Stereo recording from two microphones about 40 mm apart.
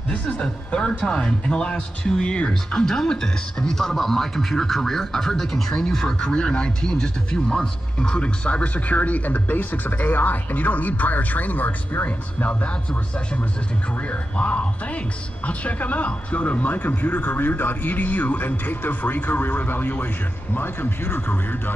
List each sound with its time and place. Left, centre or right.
0.1 s speech: left
8.5 s speech: left
14.0 s speech: left